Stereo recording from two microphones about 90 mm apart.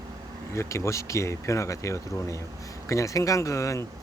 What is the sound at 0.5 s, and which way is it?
Speech, 35° left (ahead or behind).